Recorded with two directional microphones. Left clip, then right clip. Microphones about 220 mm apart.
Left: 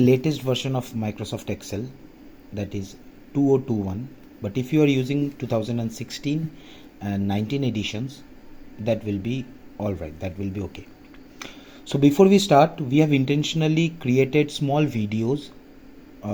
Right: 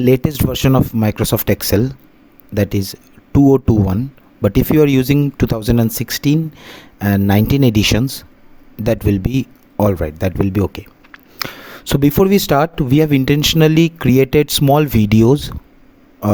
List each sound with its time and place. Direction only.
0.0 s speech: 45° right (ahead or behind)